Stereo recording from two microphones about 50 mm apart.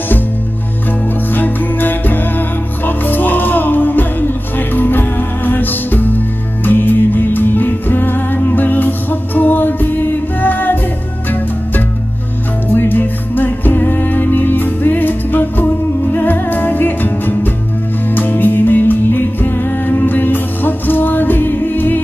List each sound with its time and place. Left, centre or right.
1.3 s music: left
12.7 s music: left